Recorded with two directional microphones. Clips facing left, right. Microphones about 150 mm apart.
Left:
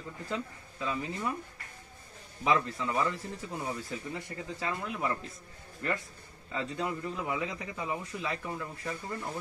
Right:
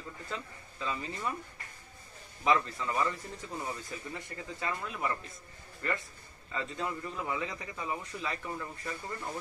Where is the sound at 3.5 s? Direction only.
15° left (ahead or behind).